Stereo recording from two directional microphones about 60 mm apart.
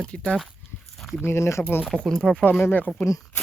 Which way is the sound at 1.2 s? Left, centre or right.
Left.